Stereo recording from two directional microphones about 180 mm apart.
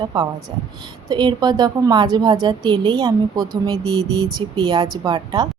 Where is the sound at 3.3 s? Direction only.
Centre (ahead or behind).